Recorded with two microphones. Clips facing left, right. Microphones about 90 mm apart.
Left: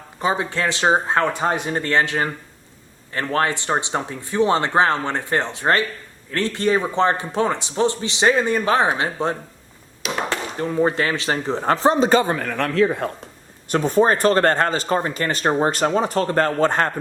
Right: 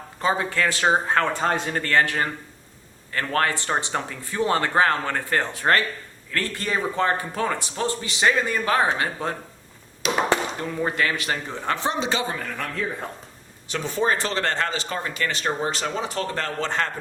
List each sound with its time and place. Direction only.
0.2 s speech: 20° left (ahead or behind)
10.0 s chop: centre (ahead or behind)
10.6 s speech: 30° left (ahead or behind); by 13.1 s 75° left (ahead or behind)
13.7 s speech: 45° left (ahead or behind)